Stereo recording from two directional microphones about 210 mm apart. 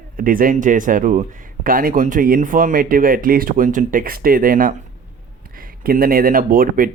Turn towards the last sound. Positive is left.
turn(degrees=-40)  # may be behind; listen again after turning